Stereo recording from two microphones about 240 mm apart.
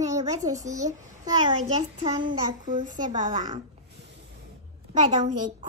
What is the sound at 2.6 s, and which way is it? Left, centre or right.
Speech, right.